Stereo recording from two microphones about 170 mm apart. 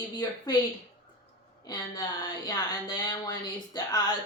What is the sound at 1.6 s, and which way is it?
Speech, 25° left (ahead or behind).